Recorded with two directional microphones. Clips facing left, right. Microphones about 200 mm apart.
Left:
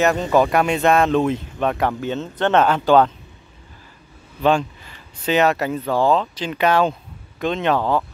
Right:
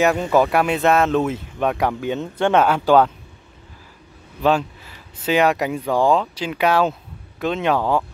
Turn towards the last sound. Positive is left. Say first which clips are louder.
# even
turn(degrees=-10)  # may be behind; listen again after turning